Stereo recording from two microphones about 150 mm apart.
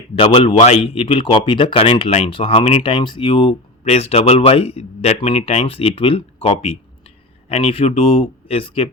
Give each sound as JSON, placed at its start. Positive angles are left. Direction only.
{"t": 0.2, "sound": "speech", "side_deg": 35}